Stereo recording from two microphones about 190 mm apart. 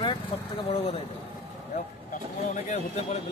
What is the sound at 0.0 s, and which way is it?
Speech, 25° left (ahead or behind).